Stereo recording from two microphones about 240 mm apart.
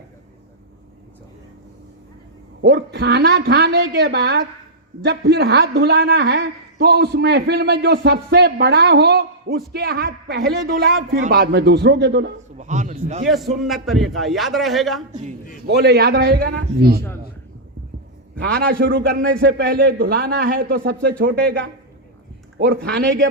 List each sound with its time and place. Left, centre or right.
2.6 s a man's voice: right
12.5 s a man's voice: right
13.6 s a man's voice: centre
15.6 s a man's voice: right
18.3 s a man's voice: right
22.5 s a man's voice: right